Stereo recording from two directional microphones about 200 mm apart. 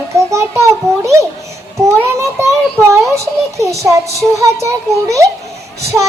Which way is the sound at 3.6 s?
15° right (ahead or behind).